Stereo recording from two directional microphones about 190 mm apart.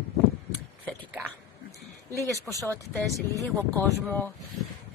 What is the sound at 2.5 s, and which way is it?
Speech, 10° right (ahead or behind).